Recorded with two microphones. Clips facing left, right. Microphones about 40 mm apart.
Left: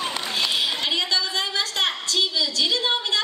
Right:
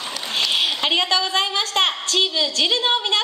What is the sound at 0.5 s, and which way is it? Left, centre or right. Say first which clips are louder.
A woman's voice: right 6 dB; right.